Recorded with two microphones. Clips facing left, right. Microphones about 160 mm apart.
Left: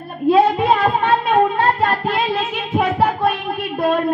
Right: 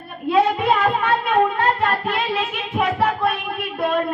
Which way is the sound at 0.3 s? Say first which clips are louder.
Left 4 dB; 30° left (ahead or behind).